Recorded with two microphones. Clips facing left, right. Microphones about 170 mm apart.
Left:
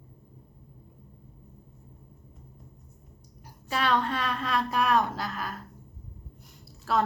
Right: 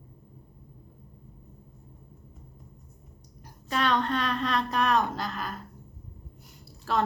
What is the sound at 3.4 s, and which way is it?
A woman's voice, 5° left (ahead or behind).